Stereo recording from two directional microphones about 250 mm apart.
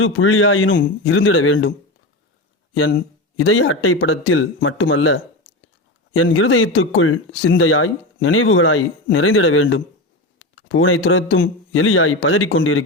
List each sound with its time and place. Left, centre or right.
0.0 s speech: left
3.3 s speech: left